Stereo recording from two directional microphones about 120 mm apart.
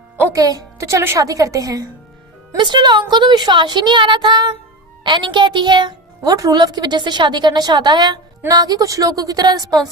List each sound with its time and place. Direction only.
0.3 s a woman's voice: 30° right (ahead or behind)
2.6 s a woman's voice: 40° right (ahead or behind)